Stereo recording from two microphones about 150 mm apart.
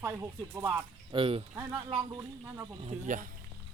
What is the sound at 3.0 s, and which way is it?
Speech, 60° right (ahead or behind).